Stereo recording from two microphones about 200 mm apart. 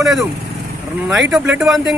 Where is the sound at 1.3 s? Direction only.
5° right (ahead or behind).